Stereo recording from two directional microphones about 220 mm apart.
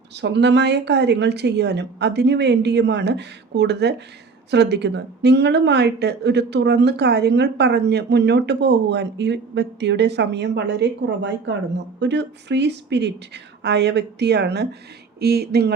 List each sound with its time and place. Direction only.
0.1 s a woman's voice: 50° right (ahead or behind)